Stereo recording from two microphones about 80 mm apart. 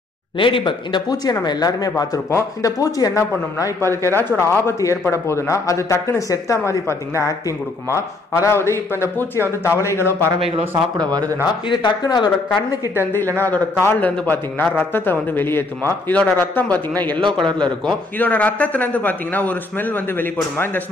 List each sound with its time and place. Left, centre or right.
0.4 s speech: left
2.3 s a man's voice: left
10.2 s speech: right
11.0 s speech: right
11.7 s speech: left
13.0 s a man's voice: left
17.2 s a man's voice: right
18.2 s a man's voice: centre